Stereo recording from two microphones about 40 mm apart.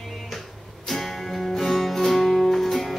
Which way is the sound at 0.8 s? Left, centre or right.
Centre.